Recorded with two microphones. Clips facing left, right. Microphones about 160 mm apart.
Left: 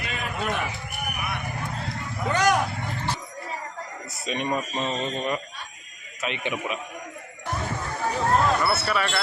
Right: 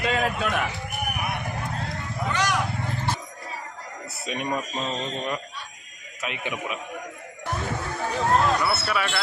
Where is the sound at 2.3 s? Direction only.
45° left (ahead or behind).